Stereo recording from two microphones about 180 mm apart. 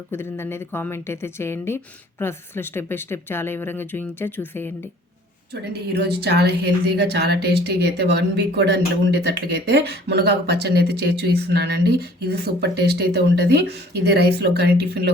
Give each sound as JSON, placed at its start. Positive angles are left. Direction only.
{"t": 0.1, "sound": "a woman's voice", "side_deg": 15}
{"t": 5.7, "sound": "speech", "side_deg": -65}